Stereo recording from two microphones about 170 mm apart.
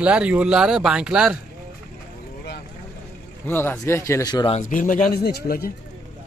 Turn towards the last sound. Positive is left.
turn(degrees=60)  # may be behind; listen again after turning